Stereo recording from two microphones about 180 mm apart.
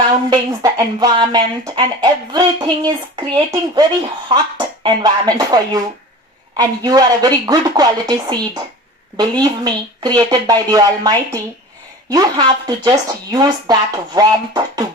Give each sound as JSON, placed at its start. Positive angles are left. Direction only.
{"t": 0.1, "sound": "speech", "side_deg": -20}